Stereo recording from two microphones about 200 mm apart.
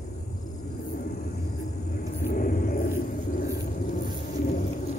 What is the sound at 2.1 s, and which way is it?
Vehicle, 45° left (ahead or behind).